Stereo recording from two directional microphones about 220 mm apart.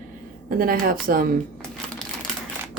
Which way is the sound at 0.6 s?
40° right (ahead or behind).